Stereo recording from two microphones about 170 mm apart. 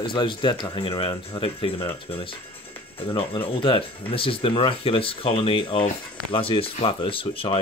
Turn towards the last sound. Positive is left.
turn(degrees=30)  # may be behind; listen again after turning